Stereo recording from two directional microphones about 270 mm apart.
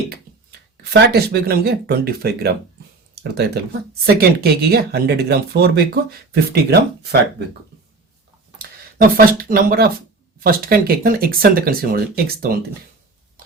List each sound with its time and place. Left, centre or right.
1.1 s speech: right
9.0 s speech: right